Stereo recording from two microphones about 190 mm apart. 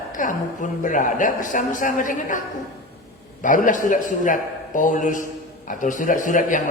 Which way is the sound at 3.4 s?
45° left (ahead or behind).